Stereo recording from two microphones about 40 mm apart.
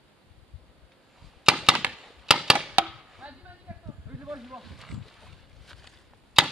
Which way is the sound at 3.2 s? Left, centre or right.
Right.